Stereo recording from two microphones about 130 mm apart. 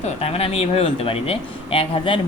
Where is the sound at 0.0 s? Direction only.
50° left (ahead or behind).